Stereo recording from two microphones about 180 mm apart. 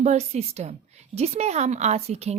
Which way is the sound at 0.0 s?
40° right (ahead or behind).